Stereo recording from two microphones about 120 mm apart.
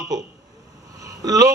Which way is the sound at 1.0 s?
30° right (ahead or behind).